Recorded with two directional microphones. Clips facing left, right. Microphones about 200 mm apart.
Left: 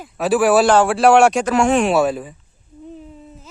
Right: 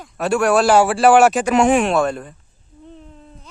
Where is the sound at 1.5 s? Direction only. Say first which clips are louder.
Right 2 dB; 20° right (ahead or behind).